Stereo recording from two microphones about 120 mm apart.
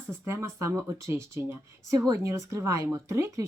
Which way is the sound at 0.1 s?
20° right (ahead or behind).